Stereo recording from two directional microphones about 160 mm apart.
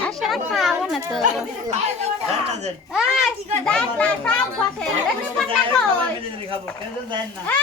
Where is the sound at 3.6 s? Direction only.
5° left (ahead or behind).